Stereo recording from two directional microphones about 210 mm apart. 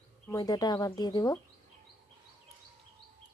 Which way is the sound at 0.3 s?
15° left (ahead or behind).